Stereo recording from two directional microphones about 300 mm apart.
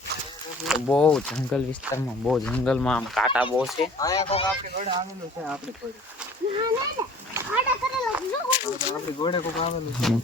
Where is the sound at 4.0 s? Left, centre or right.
Centre.